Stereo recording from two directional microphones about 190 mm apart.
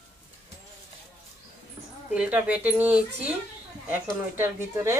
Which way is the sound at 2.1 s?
5° right (ahead or behind).